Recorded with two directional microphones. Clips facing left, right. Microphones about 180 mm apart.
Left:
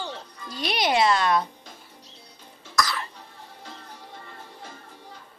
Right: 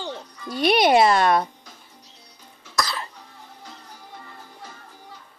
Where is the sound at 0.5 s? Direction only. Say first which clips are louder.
Right 7 dB; 60° right (ahead or behind).